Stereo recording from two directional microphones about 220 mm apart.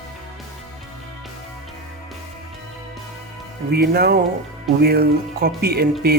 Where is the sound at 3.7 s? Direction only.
45° right (ahead or behind).